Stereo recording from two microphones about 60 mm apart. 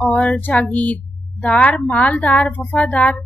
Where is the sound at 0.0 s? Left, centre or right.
Centre.